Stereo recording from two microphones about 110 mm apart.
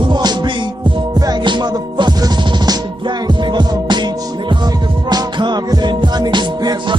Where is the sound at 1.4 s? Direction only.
45° right (ahead or behind).